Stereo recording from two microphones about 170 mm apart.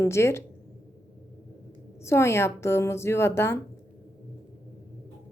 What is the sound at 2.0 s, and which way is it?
Speech, 15° left (ahead or behind).